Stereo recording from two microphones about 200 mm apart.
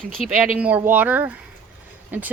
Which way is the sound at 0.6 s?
10° right (ahead or behind).